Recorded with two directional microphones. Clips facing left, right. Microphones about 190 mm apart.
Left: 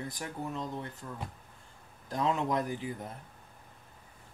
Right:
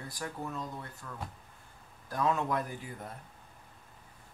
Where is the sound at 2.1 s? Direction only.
20° left (ahead or behind).